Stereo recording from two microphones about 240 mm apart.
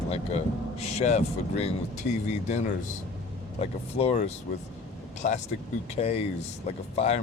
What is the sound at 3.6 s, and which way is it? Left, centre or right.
Speech, left.